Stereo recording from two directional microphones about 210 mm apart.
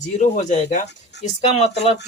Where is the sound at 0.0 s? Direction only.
35° left (ahead or behind).